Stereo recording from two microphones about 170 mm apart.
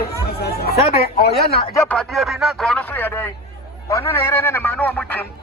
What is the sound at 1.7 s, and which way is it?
Speech, 5° left (ahead or behind).